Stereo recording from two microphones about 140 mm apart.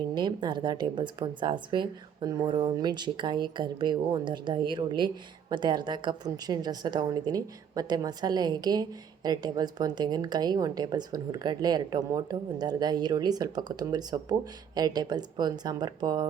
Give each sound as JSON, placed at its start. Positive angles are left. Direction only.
{"t": 0.1, "sound": "a woman's voice", "side_deg": -35}